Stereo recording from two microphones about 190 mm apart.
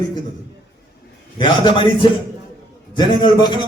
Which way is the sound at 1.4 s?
25° left (ahead or behind).